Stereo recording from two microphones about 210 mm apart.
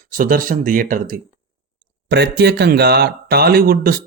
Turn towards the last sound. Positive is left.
turn(degrees=-45)  # may be behind; listen again after turning